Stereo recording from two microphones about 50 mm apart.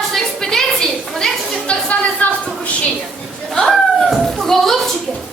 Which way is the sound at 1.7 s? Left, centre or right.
Left.